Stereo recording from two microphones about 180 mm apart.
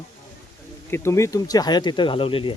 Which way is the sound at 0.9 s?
15° left (ahead or behind).